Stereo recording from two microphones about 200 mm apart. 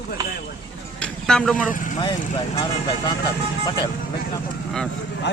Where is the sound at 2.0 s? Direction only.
25° left (ahead or behind).